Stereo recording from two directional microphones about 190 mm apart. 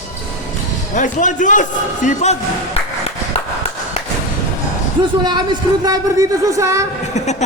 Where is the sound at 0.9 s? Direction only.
40° left (ahead or behind).